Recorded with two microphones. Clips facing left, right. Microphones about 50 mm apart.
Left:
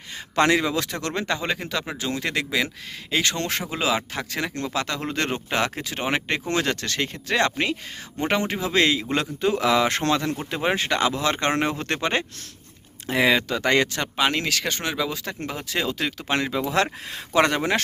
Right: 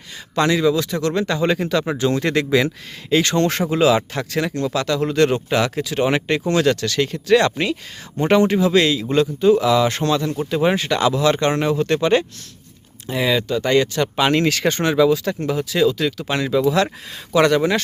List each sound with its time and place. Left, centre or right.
0.3 s a man's voice: left
1.4 s speech: centre
4.5 s speech: left
8.2 s speech: centre
8.7 s speech: left
9.1 s a man's voice: left
10.8 s a man's voice: left
14.2 s speech: centre
15.1 s speech: centre
15.7 s speech: left